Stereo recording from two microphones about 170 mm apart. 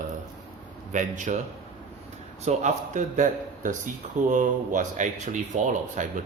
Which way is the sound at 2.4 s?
45° right (ahead or behind).